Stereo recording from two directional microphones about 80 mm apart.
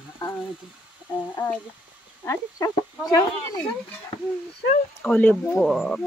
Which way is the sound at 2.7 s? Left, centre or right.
Left.